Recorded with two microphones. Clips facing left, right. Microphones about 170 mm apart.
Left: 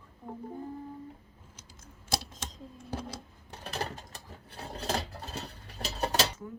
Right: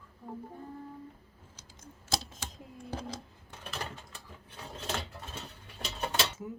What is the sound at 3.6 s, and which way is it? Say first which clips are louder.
Mechanisms: left 4 dB; 40° left (ahead or behind).